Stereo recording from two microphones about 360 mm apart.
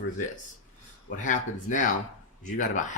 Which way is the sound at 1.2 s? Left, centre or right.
Left.